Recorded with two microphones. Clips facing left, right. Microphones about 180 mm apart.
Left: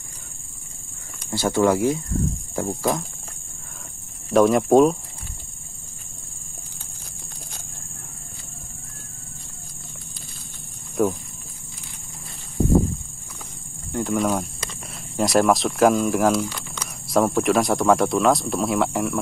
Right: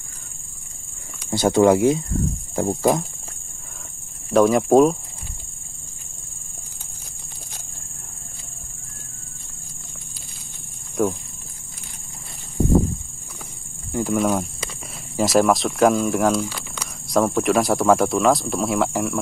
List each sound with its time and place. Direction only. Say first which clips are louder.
1.3 s speech: right 4 dB; 20° right (ahead or behind)
4.3 s speech: right 1 dB; centre (ahead or behind)
11.0 s speech: even; centre (ahead or behind)
13.9 s speech: right 2 dB; centre (ahead or behind)
16.4 s a sound: even; 10° right (ahead or behind)
17.1 s speech: even; centre (ahead or behind)